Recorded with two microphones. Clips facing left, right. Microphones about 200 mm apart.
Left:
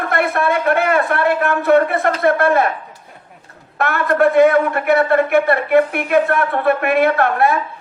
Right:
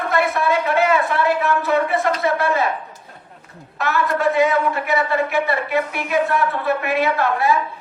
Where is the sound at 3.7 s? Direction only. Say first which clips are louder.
Left 5 dB; 55° left (ahead or behind).